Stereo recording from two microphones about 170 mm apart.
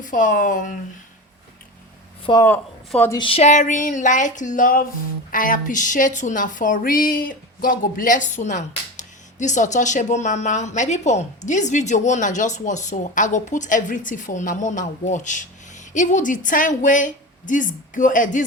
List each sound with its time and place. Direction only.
0.0 s a woman's voice: 50° left (ahead or behind)
2.4 s speech: 10° left (ahead or behind)
3.2 s a woman's voice: 35° left (ahead or behind); by 18.4 s 50° left (ahead or behind)